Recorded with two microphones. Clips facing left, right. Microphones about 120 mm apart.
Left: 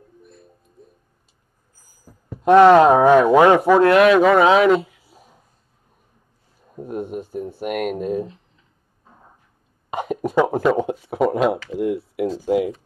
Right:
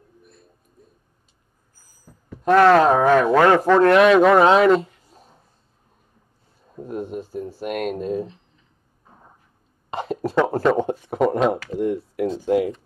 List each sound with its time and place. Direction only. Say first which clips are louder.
2.4 s speech: left 4 dB; 20° left (ahead or behind)
6.7 s speech: left 1 dB; 10° left (ahead or behind)
9.8 s speech: left 2 dB; 10° left (ahead or behind)
12.4 s speech: even; 15° left (ahead or behind)